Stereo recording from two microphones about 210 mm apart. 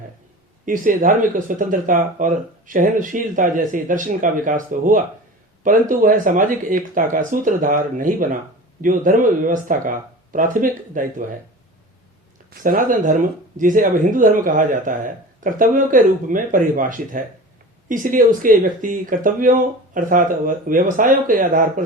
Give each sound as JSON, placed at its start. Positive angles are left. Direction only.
{"t": 0.6, "sound": "speech", "side_deg": -40}
{"t": 12.5, "sound": "speech", "side_deg": -45}